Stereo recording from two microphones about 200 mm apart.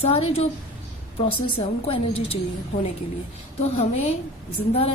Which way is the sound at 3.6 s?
30° left (ahead or behind).